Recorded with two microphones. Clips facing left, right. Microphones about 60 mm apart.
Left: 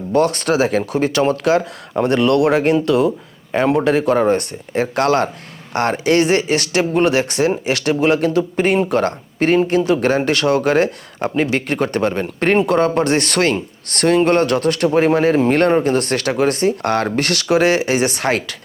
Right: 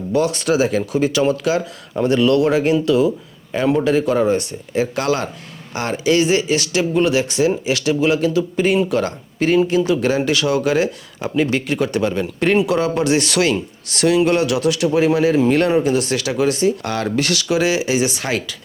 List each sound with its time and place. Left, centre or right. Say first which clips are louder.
0.1 s speech: left 2 dB; left